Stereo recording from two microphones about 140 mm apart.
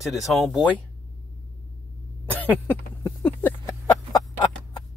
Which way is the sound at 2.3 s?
10° left (ahead or behind).